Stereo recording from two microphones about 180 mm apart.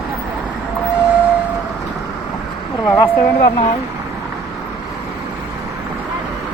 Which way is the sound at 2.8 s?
15° left (ahead or behind).